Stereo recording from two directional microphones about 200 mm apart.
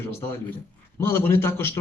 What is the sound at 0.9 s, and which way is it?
Speech, 10° left (ahead or behind).